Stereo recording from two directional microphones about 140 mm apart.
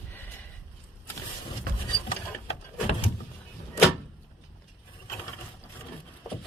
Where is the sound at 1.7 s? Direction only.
90° right.